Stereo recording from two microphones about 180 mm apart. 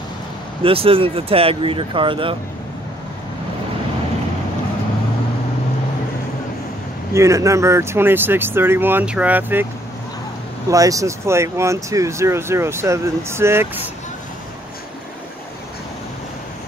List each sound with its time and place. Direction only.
0.7 s speech: 30° right (ahead or behind)
7.2 s speech: 15° right (ahead or behind)
10.7 s speech: 20° right (ahead or behind)